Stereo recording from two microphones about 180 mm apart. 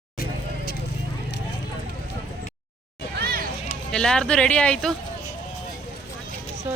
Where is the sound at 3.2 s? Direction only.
60° right (ahead or behind).